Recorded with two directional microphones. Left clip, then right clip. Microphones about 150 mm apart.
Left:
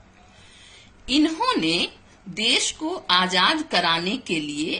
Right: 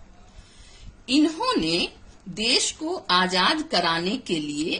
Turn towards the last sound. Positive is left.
turn(degrees=-55)  # may be behind; listen again after turning